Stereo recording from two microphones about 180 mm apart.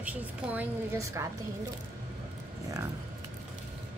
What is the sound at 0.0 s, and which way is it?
A woman's voice, 10° right (ahead or behind).